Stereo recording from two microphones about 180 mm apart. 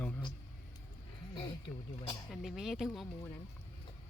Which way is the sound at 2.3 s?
Centre (ahead or behind).